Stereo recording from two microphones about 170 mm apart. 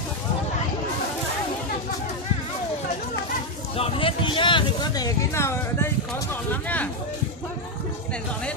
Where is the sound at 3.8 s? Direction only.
35° left (ahead or behind); by 6.8 s 10° left (ahead or behind).